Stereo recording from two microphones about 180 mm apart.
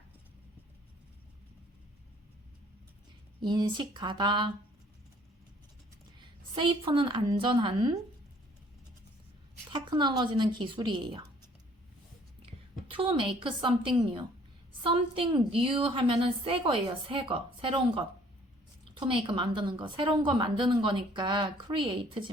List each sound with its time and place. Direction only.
3.4 s a woman's voice: 25° right (ahead or behind)
6.1 s a woman's voice: 25° right (ahead or behind)
9.7 s a woman's voice: 25° right (ahead or behind)
12.9 s a woman's voice: 30° right (ahead or behind)